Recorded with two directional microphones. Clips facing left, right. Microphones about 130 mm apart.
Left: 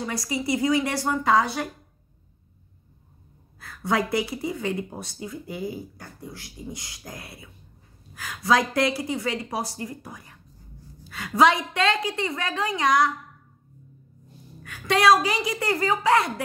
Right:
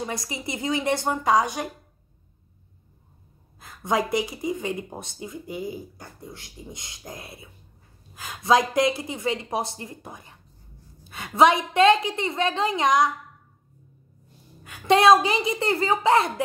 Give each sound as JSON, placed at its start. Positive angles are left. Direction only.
{"t": 0.0, "sound": "speech", "side_deg": -20}
{"t": 3.5, "sound": "speech", "side_deg": -20}
{"t": 14.6, "sound": "speech", "side_deg": -20}